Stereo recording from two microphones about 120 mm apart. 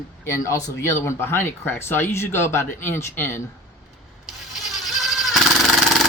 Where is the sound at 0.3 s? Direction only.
25° left (ahead or behind).